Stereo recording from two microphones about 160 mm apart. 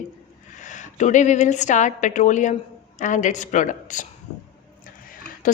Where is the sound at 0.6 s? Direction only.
50° left (ahead or behind).